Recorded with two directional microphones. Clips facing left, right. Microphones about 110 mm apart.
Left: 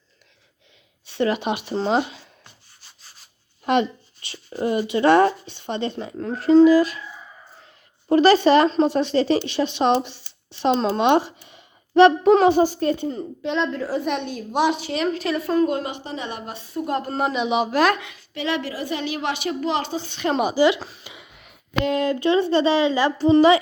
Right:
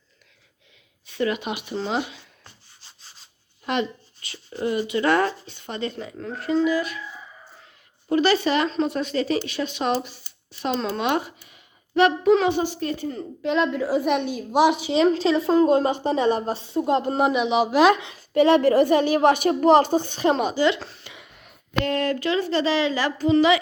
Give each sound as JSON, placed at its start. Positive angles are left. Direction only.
{"t": 1.1, "sound": "speech", "side_deg": 30}
{"t": 3.7, "sound": "speech", "side_deg": 25}
{"t": 6.1, "sound": "speech", "side_deg": 40}
{"t": 8.1, "sound": "a child's voice", "side_deg": 40}
{"t": 13.4, "sound": "a woman's voice", "side_deg": -5}
{"t": 14.9, "sound": "a woman's voice", "side_deg": -25}
{"t": 17.4, "sound": "speech", "side_deg": 0}
{"t": 17.7, "sound": "a woman's voice", "side_deg": -15}
{"t": 18.1, "sound": "a woman's voice", "side_deg": -40}
{"t": 20.3, "sound": "a sound", "side_deg": 5}
{"t": 21.8, "sound": "speech", "side_deg": 15}